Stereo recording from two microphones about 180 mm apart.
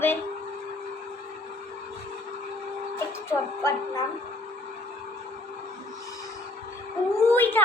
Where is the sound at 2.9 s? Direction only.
15° left (ahead or behind).